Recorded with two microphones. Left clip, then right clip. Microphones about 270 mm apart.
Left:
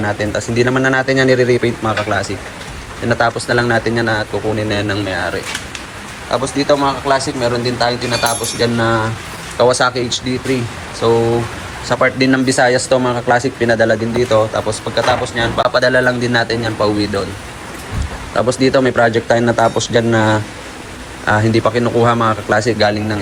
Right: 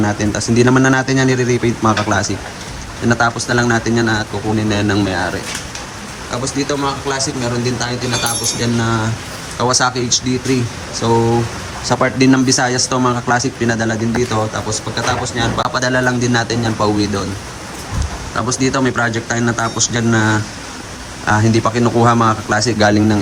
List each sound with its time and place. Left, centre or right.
0.0 s speech: centre
6.7 s speech: centre
11.0 s speech: centre
18.7 s speech: centre
22.8 s speech: centre